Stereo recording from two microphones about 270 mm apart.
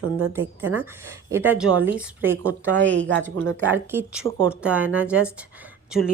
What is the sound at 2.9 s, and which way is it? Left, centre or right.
Speech, right.